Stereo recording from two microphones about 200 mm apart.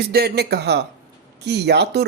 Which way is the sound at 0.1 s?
50° right (ahead or behind).